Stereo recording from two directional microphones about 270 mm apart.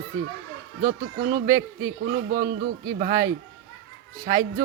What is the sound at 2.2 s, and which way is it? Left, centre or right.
Speech, right.